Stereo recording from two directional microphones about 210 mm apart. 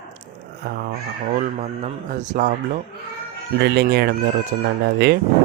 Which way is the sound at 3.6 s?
50° right (ahead or behind).